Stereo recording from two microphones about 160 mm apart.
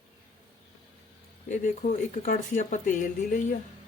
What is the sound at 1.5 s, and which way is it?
Speech, 50° left (ahead or behind).